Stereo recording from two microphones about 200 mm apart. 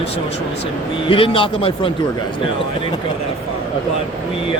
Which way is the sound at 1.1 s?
25° left (ahead or behind).